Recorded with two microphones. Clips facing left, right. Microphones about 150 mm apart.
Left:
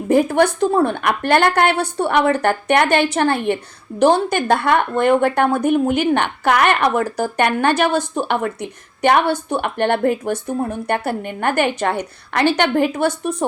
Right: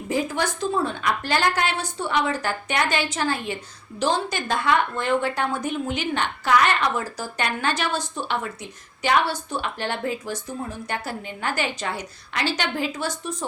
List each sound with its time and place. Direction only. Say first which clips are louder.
0.1 s a woman's voice: left 10 dB; 60° left (ahead or behind)